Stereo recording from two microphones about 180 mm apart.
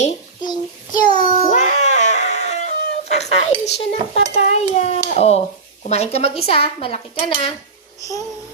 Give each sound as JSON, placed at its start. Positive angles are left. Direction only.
{"t": 0.4, "sound": "child singing", "side_deg": 25}
{"t": 1.2, "sound": "a sound", "side_deg": 45}
{"t": 3.7, "sound": "speech", "side_deg": 35}